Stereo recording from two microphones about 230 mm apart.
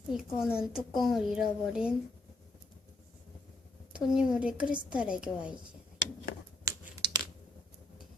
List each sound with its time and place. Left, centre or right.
0.1 s speech: centre
3.9 s speech: centre
6.7 s finger snapping: centre